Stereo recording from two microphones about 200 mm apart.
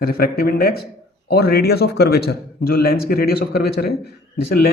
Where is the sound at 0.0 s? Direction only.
50° left (ahead or behind).